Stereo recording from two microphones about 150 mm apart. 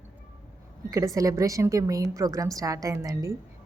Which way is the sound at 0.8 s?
20° right (ahead or behind).